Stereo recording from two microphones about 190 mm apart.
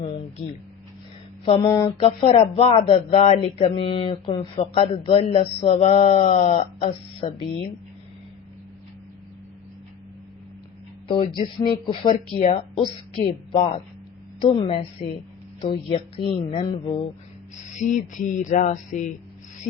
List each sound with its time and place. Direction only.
1.5 s a sound: 20° left (ahead or behind)
2.0 s speech: 30° left (ahead or behind)
11.1 s speech: 25° left (ahead or behind)
14.4 s speech: 25° left (ahead or behind)
17.7 s speech: 40° left (ahead or behind)